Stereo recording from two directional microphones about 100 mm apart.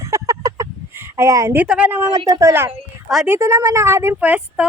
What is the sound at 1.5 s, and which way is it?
Speech, 15° right (ahead or behind).